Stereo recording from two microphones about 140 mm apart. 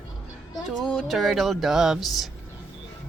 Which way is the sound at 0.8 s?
Centre (ahead or behind).